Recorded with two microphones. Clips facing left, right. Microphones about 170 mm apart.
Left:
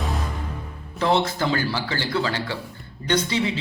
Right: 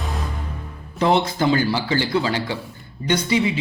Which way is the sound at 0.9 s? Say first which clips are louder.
Right 3 dB; 15° right (ahead or behind).